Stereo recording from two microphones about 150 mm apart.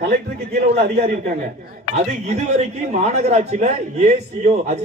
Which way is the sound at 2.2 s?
50° right (ahead or behind).